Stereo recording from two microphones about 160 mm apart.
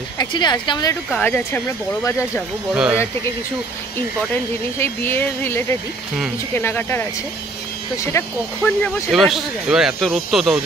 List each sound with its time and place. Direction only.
0.2 s speech: 30° left (ahead or behind)
1.1 s speech: 15° left (ahead or behind)
2.7 s speech: 5° right (ahead or behind)
4.7 s speech: 15° left (ahead or behind)
9.1 s speech: centre (ahead or behind)